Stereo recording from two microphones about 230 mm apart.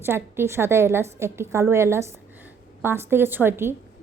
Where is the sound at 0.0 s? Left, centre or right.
Centre.